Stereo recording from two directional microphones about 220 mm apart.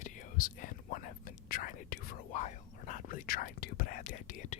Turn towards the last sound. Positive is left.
turn(degrees=35)  # may be behind; listen again after turning